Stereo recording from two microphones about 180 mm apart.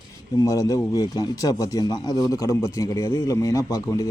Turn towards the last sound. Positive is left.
turn(degrees=15)  # may be behind; listen again after turning